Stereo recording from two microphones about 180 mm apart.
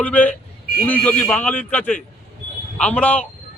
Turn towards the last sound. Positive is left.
turn(degrees=10)  # may be behind; listen again after turning